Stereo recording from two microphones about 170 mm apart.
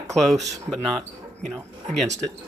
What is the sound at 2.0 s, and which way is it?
Speech, 40° right (ahead or behind).